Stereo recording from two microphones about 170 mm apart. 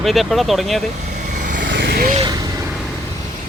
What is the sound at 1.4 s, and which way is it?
Vehicle, 50° right (ahead or behind).